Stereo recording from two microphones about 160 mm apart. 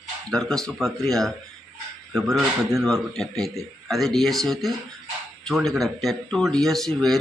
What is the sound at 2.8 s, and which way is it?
Speech, centre (ahead or behind).